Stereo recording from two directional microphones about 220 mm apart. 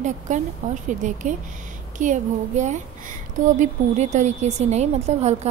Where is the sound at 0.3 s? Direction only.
35° right (ahead or behind).